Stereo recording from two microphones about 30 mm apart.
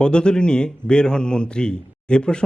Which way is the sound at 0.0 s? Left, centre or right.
Left.